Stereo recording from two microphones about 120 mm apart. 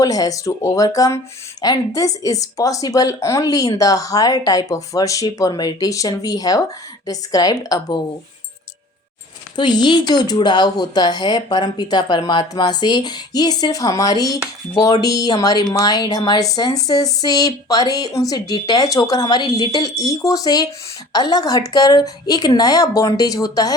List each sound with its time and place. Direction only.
0.0 s a woman's voice: 30° left (ahead or behind)
9.6 s speech: 40° left (ahead or behind)